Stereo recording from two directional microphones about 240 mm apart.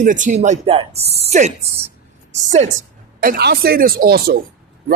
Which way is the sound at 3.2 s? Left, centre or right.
Right.